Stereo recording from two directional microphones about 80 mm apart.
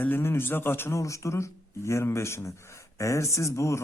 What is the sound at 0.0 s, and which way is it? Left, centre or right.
A man's voice, left.